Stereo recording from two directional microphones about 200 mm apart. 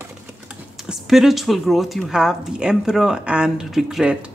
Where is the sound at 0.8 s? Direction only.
Centre (ahead or behind).